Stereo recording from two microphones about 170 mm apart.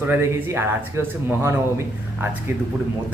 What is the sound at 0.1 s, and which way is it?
Speech, 15° right (ahead or behind).